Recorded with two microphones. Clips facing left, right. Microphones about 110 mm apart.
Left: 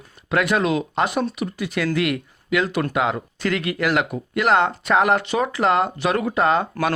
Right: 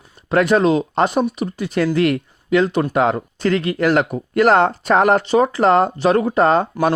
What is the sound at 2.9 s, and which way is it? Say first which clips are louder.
Speech: right 5 dB; 40° right (ahead or behind).